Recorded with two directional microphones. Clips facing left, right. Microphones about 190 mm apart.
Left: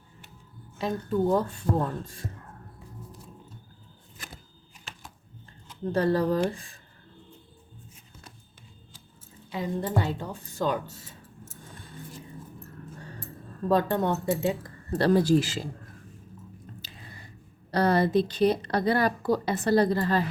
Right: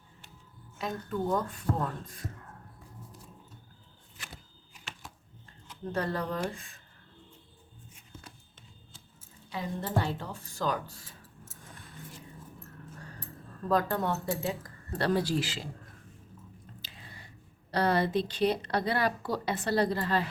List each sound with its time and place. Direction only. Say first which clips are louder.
0.8 s speech: left 7 dB; 30° left (ahead or behind)
5.6 s speech: left 8 dB; 30° left (ahead or behind)
9.5 s speech: left 4 dB; 20° left (ahead or behind)
11.7 s vehicle: left 2 dB; 30° left (ahead or behind)
13.7 s speech: left 4 dB; 25° left (ahead or behind); by 15.7 s 45° left (ahead or behind)
17.7 s a woman's voice: left 4 dB; 40° left (ahead or behind)